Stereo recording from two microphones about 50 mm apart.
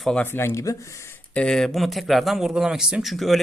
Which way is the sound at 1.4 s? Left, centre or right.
Centre.